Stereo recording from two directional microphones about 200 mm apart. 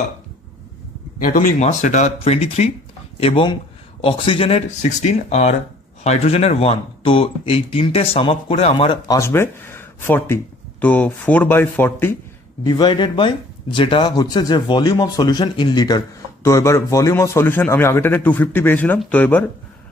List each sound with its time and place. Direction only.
1.2 s speech: 40° left (ahead or behind); by 12.2 s 10° left (ahead or behind)
12.6 s a man's voice: 20° left (ahead or behind)